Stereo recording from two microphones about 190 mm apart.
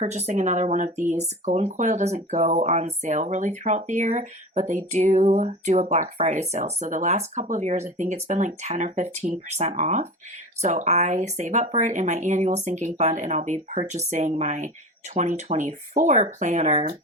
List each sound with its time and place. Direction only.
0.0 s speech: 35° right (ahead or behind)